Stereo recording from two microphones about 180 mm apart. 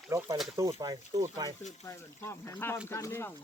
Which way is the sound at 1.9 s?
15° left (ahead or behind).